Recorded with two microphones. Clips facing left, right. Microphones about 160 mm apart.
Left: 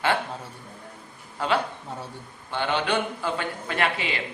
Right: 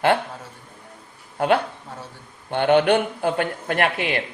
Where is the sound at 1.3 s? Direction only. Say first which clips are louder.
Right 5 dB; 55° right (ahead or behind).